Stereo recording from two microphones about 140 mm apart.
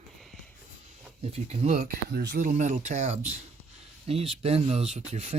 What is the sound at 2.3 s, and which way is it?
Speech, 65° right (ahead or behind).